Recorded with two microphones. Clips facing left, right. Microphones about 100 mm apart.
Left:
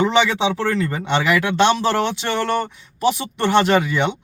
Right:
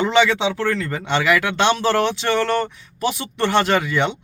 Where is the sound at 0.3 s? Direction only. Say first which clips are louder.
Even; 25° left (ahead or behind).